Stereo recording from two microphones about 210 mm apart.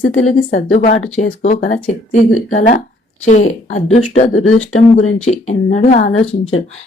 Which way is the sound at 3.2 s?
35° left (ahead or behind).